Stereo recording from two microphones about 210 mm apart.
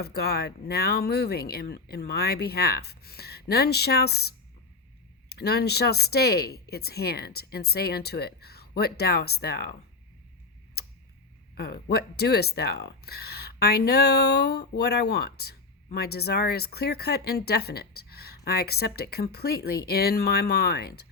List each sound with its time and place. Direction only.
0.0 s speech: 50° left (ahead or behind)
11.5 s speech: 50° left (ahead or behind)